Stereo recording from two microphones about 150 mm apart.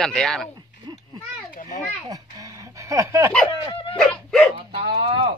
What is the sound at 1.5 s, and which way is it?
Children playing, 55° left (ahead or behind).